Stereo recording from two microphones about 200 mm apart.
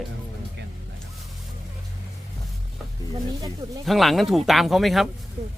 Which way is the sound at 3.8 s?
Centre (ahead or behind).